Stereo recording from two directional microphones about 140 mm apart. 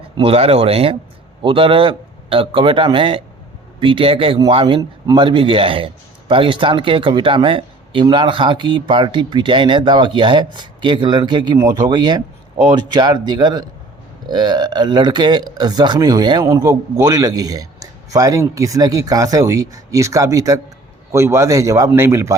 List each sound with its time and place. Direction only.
0.2 s speech: 45° right (ahead or behind); by 22.4 s 20° right (ahead or behind)